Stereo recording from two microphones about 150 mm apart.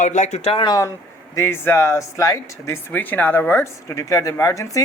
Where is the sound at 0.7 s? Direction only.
20° left (ahead or behind).